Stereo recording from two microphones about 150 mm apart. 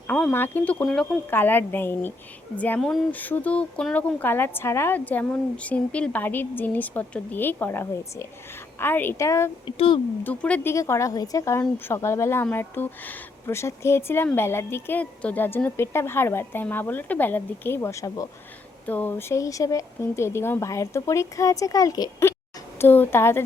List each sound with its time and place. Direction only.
0.1 s speech: 10° left (ahead or behind)
9.6 s speech: 35° left (ahead or behind)
10.2 s speech: 10° left (ahead or behind)